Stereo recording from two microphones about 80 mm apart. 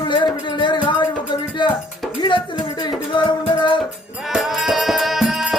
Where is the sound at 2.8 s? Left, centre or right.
Left.